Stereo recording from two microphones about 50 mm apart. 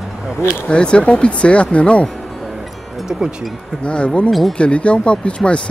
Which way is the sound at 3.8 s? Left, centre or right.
Left.